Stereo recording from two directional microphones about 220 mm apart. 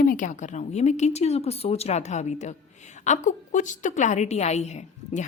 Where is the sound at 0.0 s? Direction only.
35° left (ahead or behind).